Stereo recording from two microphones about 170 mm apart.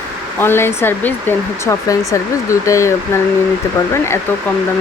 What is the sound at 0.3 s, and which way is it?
Speech, 15° left (ahead or behind).